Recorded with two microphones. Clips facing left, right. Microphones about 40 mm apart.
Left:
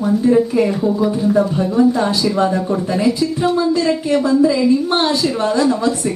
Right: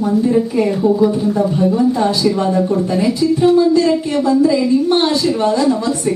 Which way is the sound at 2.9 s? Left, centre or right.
Centre.